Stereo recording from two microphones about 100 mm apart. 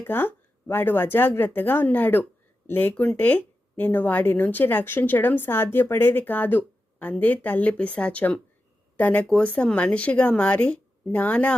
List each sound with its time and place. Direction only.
0.0 s speech: 20° left (ahead or behind)